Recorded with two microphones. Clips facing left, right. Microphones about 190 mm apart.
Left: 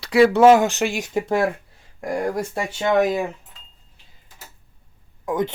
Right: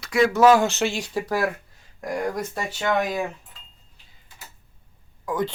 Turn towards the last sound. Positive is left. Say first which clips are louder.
# left 3 dB
turn(degrees=20)  # may be behind; listen again after turning